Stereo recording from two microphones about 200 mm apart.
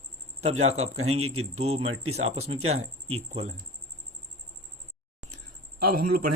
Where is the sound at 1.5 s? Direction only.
30° right (ahead or behind).